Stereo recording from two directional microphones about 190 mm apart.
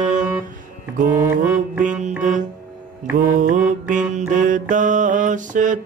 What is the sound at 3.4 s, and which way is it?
Mantra, 40° right (ahead or behind).